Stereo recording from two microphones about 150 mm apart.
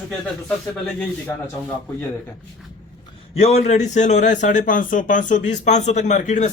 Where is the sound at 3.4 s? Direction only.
50° left (ahead or behind).